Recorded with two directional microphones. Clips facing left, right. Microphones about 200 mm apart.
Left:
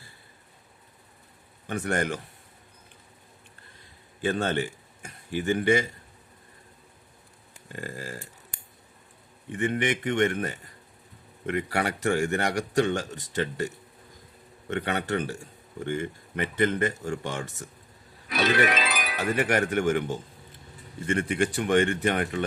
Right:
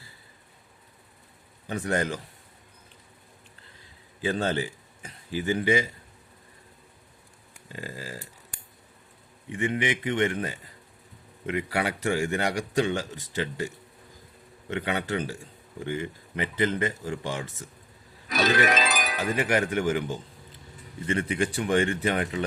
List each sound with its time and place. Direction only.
1.7 s a man's voice: 55° left (ahead or behind)
4.2 s a man's voice: 55° left (ahead or behind)
7.7 s speech: 55° left (ahead or behind)
9.5 s speech: 50° left (ahead or behind)
14.7 s speech: 50° left (ahead or behind)
18.3 s music: 40° right (ahead or behind)
19.4 s a man's voice: 55° left (ahead or behind)